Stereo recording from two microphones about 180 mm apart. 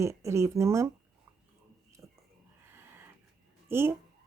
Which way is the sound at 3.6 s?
15° right (ahead or behind).